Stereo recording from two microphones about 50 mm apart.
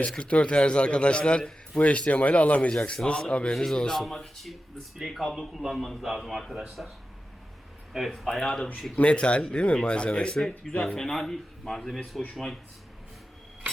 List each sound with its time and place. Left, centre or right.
0.1 s a man's voice: left; by 6.9 s centre
7.9 s a man's voice: centre
9.0 s a man's voice: left
10.8 s a man's voice: centre